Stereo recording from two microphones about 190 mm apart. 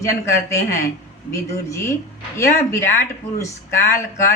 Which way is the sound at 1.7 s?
15° left (ahead or behind).